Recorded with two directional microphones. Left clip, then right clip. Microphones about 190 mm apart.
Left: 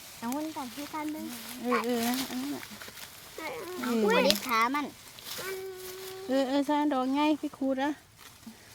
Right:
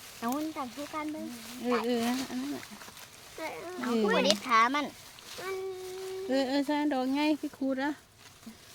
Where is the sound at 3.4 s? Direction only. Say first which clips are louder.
Left 1 dB; 10° right (ahead or behind).